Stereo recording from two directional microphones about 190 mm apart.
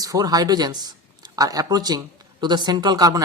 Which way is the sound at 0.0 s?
20° right (ahead or behind).